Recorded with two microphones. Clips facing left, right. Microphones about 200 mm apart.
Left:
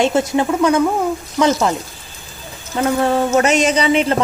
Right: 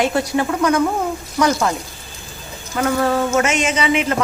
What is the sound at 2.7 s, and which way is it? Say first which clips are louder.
A woman's voice: left 2 dB; 25° left (ahead or behind).